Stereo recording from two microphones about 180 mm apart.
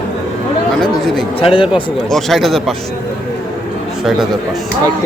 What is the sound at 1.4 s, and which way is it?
Speech, 30° left (ahead or behind).